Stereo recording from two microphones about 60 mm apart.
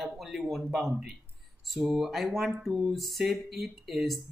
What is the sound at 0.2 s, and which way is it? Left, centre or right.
Speech, centre.